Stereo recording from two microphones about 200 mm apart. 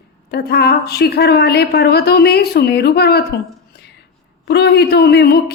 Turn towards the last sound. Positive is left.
turn(degrees=55)  # may be behind; listen again after turning